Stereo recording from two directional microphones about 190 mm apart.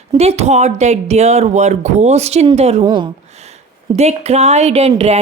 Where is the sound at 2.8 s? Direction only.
25° right (ahead or behind).